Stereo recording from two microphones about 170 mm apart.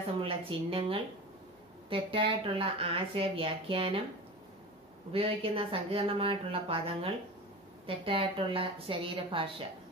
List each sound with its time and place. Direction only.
0.2 s speech: 30° right (ahead or behind)
5.1 s speech: 35° right (ahead or behind)